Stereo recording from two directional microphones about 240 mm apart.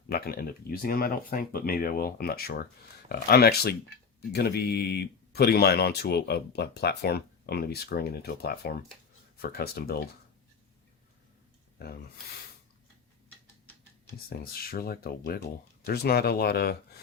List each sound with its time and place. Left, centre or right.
0.1 s speech: left
11.8 s speech: left
14.3 s speech: left